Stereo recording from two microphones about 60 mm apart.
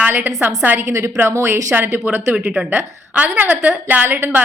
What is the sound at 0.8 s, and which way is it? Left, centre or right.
Speech, right.